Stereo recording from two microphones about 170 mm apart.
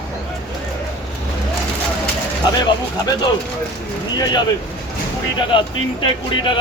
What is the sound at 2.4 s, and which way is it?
Speech, 25° left (ahead or behind).